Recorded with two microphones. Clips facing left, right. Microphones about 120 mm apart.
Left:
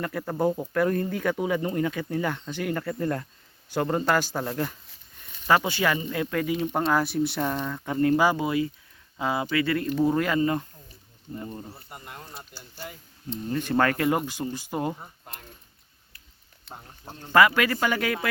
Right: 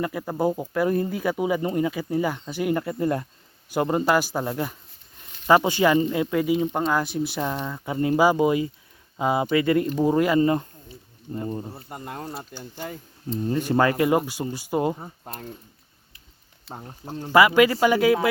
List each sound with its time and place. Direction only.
0.0 s speech: 10° right (ahead or behind)
6.7 s speech: centre (ahead or behind); by 10.5 s 15° right (ahead or behind)
10.5 s a sound: 25° right (ahead or behind)
11.3 s speech: 25° right (ahead or behind)
12.5 s speech: 20° right (ahead or behind)
15.2 s speech: 35° right (ahead or behind)
17.2 s speech: 10° right (ahead or behind)